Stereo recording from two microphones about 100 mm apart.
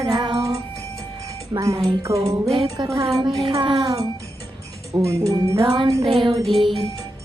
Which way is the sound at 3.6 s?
55° right (ahead or behind).